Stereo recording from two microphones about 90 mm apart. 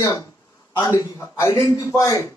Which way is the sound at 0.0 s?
40° left (ahead or behind).